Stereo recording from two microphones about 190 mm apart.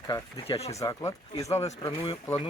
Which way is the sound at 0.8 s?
15° left (ahead or behind).